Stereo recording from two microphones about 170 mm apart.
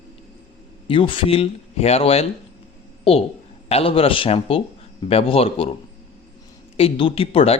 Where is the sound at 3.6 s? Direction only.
35° left (ahead or behind).